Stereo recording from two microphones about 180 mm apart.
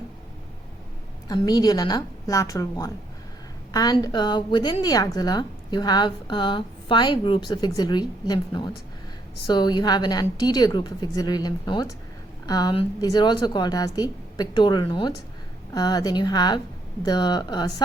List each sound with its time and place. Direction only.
1.3 s a woman's voice: 20° left (ahead or behind)